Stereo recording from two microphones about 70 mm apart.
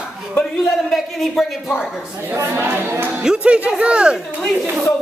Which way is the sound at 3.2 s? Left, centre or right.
Centre.